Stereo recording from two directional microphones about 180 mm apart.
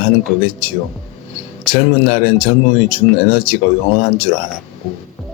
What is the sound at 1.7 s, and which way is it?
Speech, 35° left (ahead or behind).